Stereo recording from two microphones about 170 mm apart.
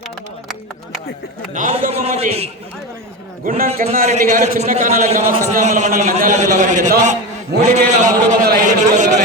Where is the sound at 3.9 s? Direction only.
45° right (ahead or behind).